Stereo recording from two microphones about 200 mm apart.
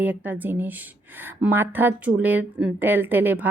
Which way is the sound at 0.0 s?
10° right (ahead or behind).